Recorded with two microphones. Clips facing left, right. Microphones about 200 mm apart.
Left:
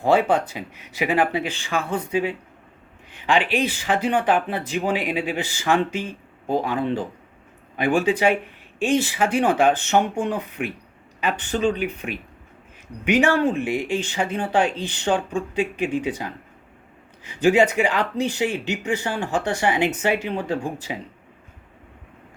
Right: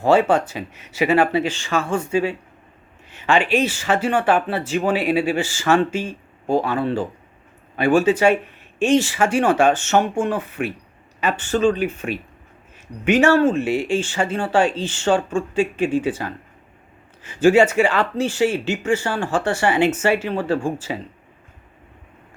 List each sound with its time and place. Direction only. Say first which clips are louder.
0.0 s speech: right 3 dB; 15° left (ahead or behind)
3.1 s a sound: right 2 dB; 15° left (ahead or behind)
3.5 s speech: right 3 dB; 15° left (ahead or behind)